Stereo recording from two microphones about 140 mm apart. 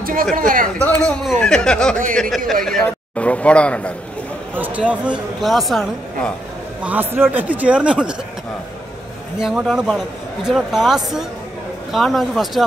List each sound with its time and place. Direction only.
0.0 s speech: 90° right
0.7 s a man's voice: 10° left (ahead or behind)
4.6 s speech: 10° right (ahead or behind)
6.8 s a man's voice: 10° right (ahead or behind)
9.4 s speech: 5° right (ahead or behind)